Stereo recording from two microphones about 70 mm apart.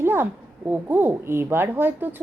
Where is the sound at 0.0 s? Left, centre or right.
Right.